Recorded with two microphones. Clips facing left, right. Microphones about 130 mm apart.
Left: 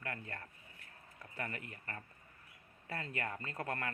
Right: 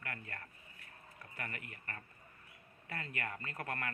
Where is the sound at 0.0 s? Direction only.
25° left (ahead or behind).